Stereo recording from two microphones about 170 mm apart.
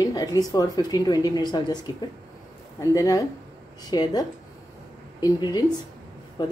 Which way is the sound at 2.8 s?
20° left (ahead or behind).